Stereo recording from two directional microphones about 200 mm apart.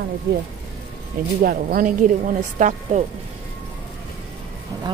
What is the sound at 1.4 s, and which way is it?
Speech, 45° right (ahead or behind).